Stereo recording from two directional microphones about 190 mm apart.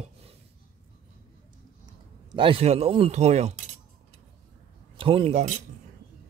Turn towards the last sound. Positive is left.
turn(degrees=-35)  # may be behind; listen again after turning